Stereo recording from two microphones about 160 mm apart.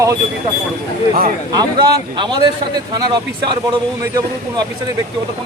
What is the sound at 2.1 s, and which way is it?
Speech, 25° right (ahead or behind).